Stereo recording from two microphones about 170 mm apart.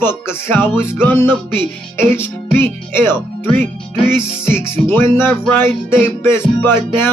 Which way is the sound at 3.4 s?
10° left (ahead or behind).